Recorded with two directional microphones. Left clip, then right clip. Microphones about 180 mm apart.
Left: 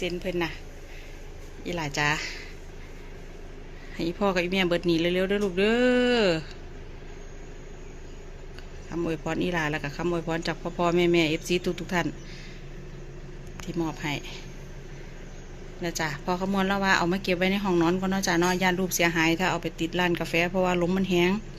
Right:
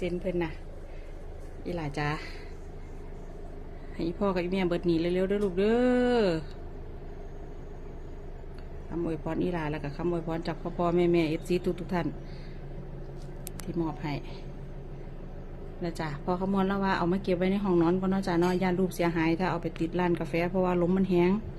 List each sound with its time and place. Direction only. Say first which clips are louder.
0.0 s a woman's voice: left 2 dB; centre (ahead or behind)
1.6 s a woman's voice: left 6 dB; centre (ahead or behind)
3.9 s a woman's voice: left 4 dB; centre (ahead or behind)
9.0 s a woman's voice: left 3 dB; centre (ahead or behind)
13.7 s a woman's voice: left 3 dB; 5° right (ahead or behind)
15.8 s a woman's voice: left 5 dB; 5° right (ahead or behind)